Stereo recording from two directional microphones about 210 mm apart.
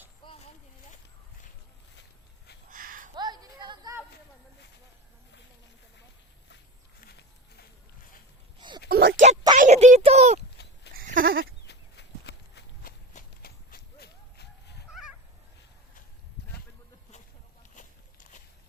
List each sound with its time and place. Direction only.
0.3 s a sound: 30° left (ahead or behind)
2.6 s a sound: 40° right (ahead or behind)
3.2 s music: 20° right (ahead or behind)
7.0 s walk: 50° left (ahead or behind)
8.9 s a sound: 45° right (ahead or behind)
10.9 s goat: 45° right (ahead or behind)
11.6 s walk: 55° left (ahead or behind)
13.1 s run: 45° left (ahead or behind)
14.8 s fowl: 5° right (ahead or behind)